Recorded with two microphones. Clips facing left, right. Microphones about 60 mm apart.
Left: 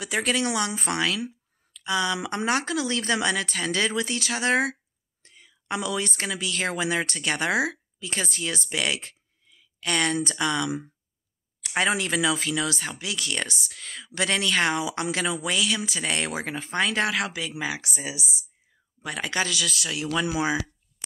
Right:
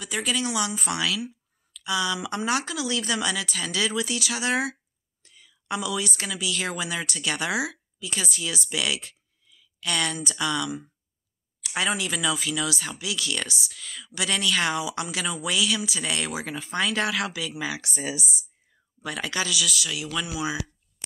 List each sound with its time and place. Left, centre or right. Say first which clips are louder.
0.0 s speech: left 2 dB; left
0.7 s speech: left 1 dB; left
1.7 s a sound: left 1 dB; left
2.2 s speech: left 1 dB; left
8.6 s a sound: even; left
10.3 s speech: left 2 dB; left
17.9 s speech: right 2 dB; centre
19.0 s speech: left 1 dB; left